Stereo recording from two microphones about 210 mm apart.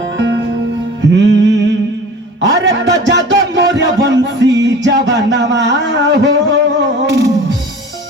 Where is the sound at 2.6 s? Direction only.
55° right (ahead or behind).